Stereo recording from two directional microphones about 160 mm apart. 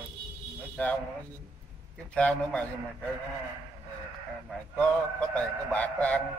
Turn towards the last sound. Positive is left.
turn(degrees=10)  # may be behind; listen again after turning